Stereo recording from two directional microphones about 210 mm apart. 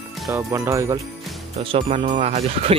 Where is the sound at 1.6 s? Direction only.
25° right (ahead or behind).